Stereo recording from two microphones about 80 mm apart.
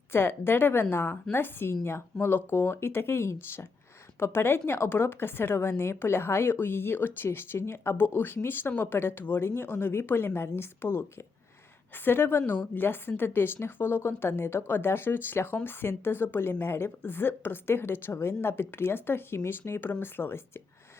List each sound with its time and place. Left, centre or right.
0.1 s a woman's voice: left
12.0 s a woman's voice: left